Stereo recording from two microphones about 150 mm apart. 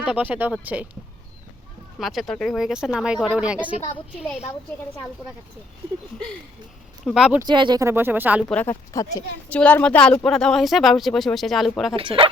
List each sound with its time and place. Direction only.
0.0 s speech: 10° right (ahead or behind)
2.0 s speech: centre (ahead or behind)
4.2 s a woman's voice: 45° left (ahead or behind)
7.0 s speech: centre (ahead or behind)
7.4 s speech: 30° right (ahead or behind); by 8.4 s 10° right (ahead or behind)
8.4 s speech: 10° left (ahead or behind)
8.7 s speech: 20° left (ahead or behind)
9.5 s speech: 10° left (ahead or behind)
11.9 s speech: 35° right (ahead or behind)